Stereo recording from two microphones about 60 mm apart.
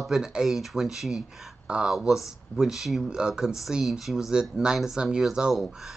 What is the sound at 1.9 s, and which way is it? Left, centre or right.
Speech, centre.